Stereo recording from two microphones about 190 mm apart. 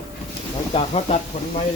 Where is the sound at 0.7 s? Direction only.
35° left (ahead or behind).